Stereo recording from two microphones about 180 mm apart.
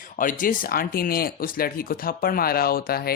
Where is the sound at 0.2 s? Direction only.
50° left (ahead or behind).